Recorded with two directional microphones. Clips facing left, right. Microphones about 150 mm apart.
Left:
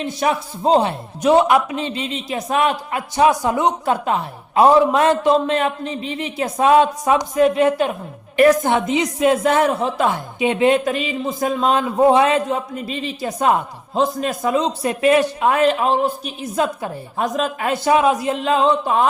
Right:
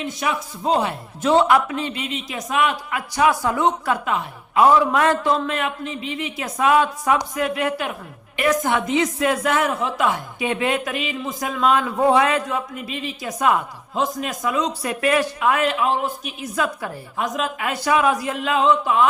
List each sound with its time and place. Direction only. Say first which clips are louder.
0.0 s a man's voice: left 5 dB; 35° left (ahead or behind)
1.2 s a man's voice: left 2 dB; 15° left (ahead or behind)
4.0 s a man's voice: left 3 dB; 30° left (ahead or behind)
4.9 s a man's voice: left 4 dB; 20° left (ahead or behind)